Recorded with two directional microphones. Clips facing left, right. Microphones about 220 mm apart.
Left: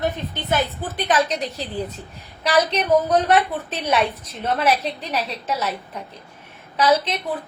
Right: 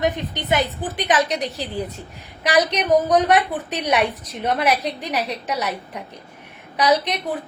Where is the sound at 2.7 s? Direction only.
15° right (ahead or behind).